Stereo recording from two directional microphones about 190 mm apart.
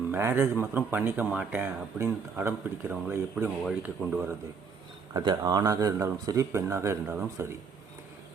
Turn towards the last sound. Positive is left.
turn(degrees=-15)  # may be behind; listen again after turning